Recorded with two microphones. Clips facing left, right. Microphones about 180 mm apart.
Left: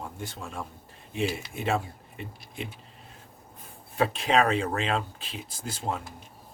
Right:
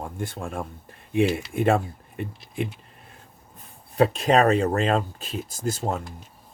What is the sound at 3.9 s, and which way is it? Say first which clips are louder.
Speech: right 5 dB; 40° right (ahead or behind).